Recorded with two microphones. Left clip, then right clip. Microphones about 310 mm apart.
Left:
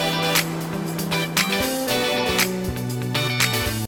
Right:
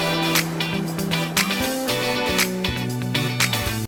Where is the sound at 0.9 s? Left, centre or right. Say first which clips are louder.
Left 1 dB; centre.